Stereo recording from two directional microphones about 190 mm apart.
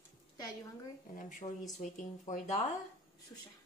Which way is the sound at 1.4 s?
25° left (ahead or behind).